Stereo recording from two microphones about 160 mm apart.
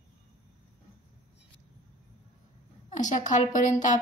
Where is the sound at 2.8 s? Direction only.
50° left (ahead or behind).